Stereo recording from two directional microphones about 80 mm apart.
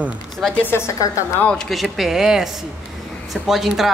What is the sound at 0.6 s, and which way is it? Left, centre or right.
Speech, left.